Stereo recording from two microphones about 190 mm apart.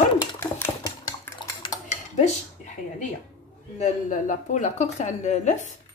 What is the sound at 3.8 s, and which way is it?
A woman's voice, 40° left (ahead or behind).